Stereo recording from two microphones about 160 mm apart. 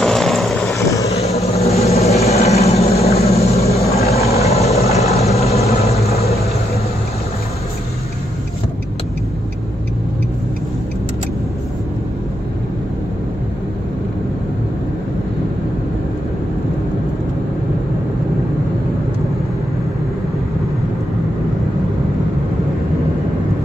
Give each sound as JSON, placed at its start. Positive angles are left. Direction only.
{"t": 0.0, "sound": "vehicle", "side_deg": 0}
{"t": 0.7, "sound": "vehicle", "side_deg": 20}
{"t": 1.2, "sound": "vehicle", "side_deg": 40}